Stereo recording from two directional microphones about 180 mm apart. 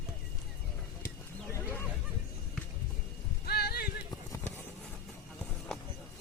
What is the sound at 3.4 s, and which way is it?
Clip-clop, 60° left (ahead or behind).